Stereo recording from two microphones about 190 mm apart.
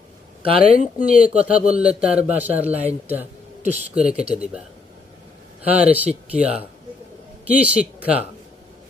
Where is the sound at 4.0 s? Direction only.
5° right (ahead or behind).